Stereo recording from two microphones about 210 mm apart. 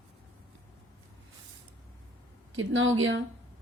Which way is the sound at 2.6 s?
70° right (ahead or behind).